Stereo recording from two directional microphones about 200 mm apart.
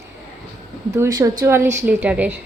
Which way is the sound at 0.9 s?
15° right (ahead or behind).